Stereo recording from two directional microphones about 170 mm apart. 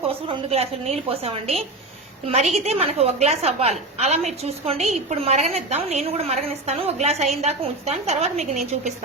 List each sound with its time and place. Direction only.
0.1 s a woman's voice: 35° right (ahead or behind)
2.6 s a woman's voice: 35° right (ahead or behind)